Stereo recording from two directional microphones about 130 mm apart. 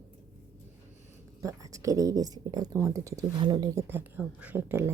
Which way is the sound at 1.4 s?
25° right (ahead or behind).